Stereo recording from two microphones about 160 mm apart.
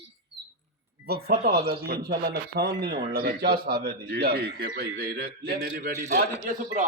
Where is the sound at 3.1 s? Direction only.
70° right (ahead or behind).